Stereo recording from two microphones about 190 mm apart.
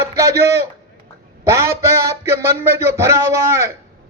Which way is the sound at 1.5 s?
15° right (ahead or behind).